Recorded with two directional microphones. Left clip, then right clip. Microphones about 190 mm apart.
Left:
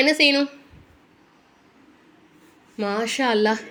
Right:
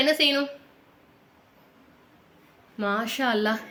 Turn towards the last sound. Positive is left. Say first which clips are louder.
# left 5 dB
turn(degrees=15)  # may be behind; listen again after turning